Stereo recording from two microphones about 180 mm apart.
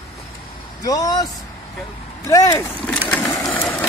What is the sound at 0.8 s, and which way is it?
Speech, 20° left (ahead or behind).